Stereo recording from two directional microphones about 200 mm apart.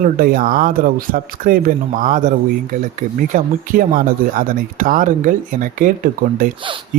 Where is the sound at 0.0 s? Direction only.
45° right (ahead or behind).